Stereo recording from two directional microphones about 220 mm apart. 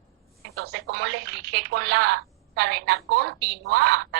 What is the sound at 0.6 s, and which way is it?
Speech, 50° right (ahead or behind).